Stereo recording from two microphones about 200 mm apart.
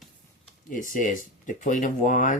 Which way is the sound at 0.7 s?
40° left (ahead or behind).